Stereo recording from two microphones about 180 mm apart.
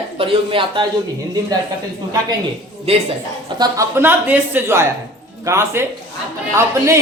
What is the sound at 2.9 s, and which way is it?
Speech, 35° right (ahead or behind).